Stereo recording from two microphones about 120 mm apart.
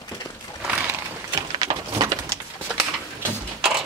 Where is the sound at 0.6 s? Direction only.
10° right (ahead or behind).